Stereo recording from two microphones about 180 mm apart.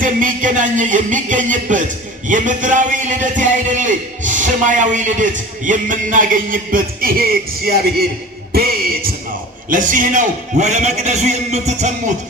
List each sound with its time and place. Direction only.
0.0 s a man's voice: 50° right (ahead or behind)
8.5 s music: 55° right (ahead or behind)
9.6 s a man's voice: 45° right (ahead or behind)